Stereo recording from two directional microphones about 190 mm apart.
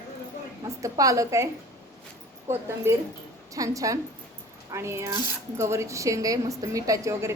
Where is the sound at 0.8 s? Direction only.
15° right (ahead or behind).